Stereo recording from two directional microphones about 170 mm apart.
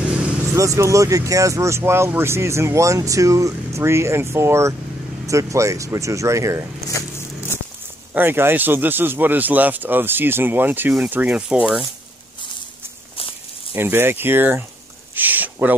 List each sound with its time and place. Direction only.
0.6 s speech: 20° right (ahead or behind)
8.1 s speech: 10° right (ahead or behind)
13.7 s speech: 15° right (ahead or behind)
15.1 s a sound: 10° right (ahead or behind)